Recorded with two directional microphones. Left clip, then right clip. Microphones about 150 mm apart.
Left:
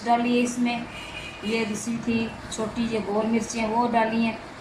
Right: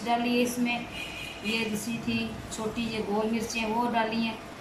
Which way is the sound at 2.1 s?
20° left (ahead or behind).